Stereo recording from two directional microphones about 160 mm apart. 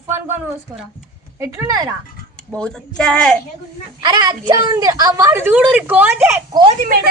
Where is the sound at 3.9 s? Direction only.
25° right (ahead or behind).